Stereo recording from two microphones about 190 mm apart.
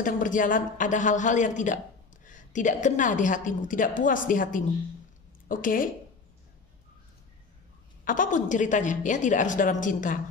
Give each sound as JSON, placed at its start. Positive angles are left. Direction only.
{"t": 0.0, "sound": "a woman's voice", "side_deg": 45}
{"t": 8.0, "sound": "a woman's voice", "side_deg": 45}